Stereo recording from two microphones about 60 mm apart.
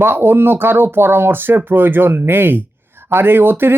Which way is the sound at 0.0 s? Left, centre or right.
Right.